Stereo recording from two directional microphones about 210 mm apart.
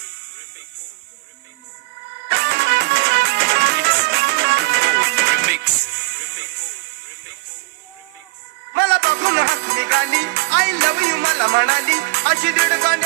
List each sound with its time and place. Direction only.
2.2 s music: 60° right (ahead or behind)
8.7 s music: 55° right (ahead or behind)